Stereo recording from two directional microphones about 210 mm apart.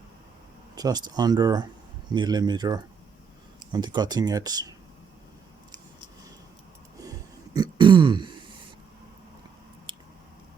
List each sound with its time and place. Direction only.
0.8 s speech: 20° right (ahead or behind)
7.1 s throat clearing: 20° right (ahead or behind)
9.9 s squish: 25° right (ahead or behind)